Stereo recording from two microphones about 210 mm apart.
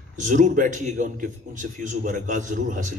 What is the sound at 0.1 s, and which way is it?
A man's voice, 35° right (ahead or behind).